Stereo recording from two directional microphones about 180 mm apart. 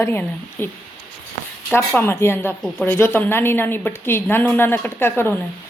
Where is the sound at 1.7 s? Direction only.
10° left (ahead or behind).